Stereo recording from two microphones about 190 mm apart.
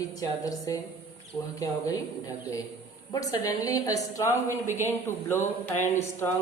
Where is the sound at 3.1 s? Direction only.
20° left (ahead or behind).